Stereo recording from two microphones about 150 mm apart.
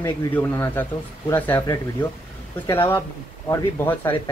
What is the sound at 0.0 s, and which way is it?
Speech, 15° left (ahead or behind).